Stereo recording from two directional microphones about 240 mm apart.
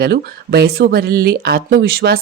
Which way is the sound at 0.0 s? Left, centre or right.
Right.